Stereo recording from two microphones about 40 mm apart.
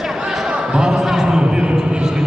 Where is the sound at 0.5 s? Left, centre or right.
Right.